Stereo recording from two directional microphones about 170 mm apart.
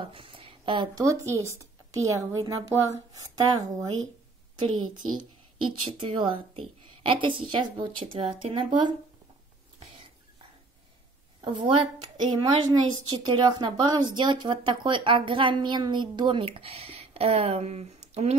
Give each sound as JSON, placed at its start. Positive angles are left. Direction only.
{"t": 0.0, "sound": "speech", "side_deg": -30}
{"t": 5.7, "sound": "a woman's voice", "side_deg": -35}
{"t": 11.4, "sound": "speech", "side_deg": -30}